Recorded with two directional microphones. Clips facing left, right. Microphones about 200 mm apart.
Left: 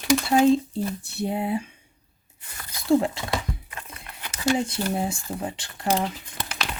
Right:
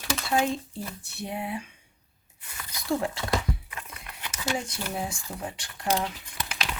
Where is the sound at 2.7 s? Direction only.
25° left (ahead or behind).